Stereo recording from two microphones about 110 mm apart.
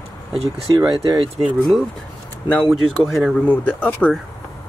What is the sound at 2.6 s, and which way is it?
Speech, centre (ahead or behind).